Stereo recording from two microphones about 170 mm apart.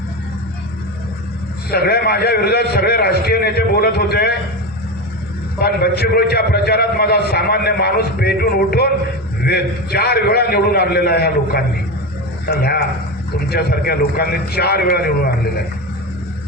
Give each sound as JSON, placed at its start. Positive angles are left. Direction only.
{"t": 1.7, "sound": "a man's voice", "side_deg": 65}
{"t": 5.5, "sound": "a man's voice", "side_deg": 70}